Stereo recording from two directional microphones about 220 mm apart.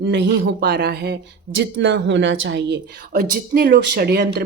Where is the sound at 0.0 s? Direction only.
55° right (ahead or behind).